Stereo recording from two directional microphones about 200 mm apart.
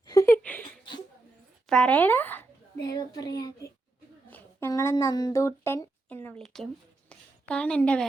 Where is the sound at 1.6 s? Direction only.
5° left (ahead or behind).